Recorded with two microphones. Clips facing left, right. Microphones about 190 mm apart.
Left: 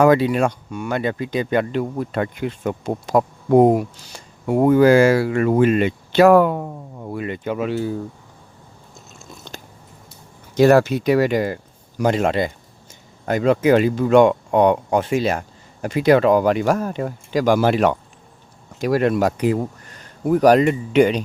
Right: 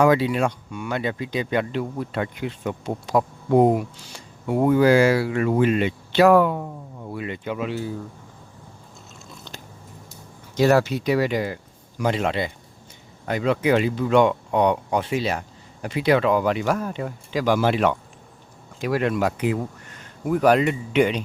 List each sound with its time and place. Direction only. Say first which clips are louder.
0.0 s speech: left 4 dB; 50° left (ahead or behind)
9.1 s biting: left 4 dB; 45° left (ahead or behind)
10.6 s speech: left 5 dB; 50° left (ahead or behind)